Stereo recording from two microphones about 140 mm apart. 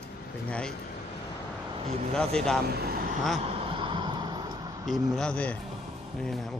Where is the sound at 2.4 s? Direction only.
5° left (ahead or behind).